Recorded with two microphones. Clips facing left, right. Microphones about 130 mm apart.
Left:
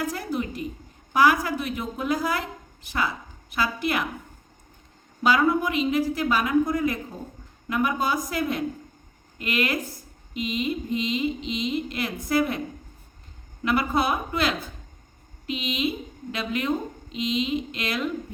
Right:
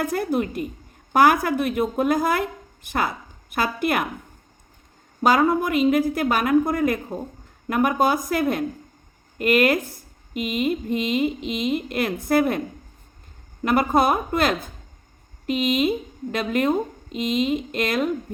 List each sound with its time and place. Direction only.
0.0 s a woman's voice: 55° right (ahead or behind)
5.2 s speech: 45° right (ahead or behind)